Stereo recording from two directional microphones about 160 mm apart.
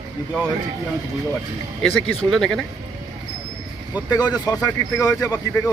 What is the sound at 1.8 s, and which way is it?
Speech, centre (ahead or behind).